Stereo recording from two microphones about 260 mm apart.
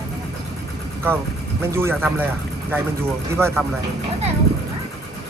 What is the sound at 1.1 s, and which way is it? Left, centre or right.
Speech, centre.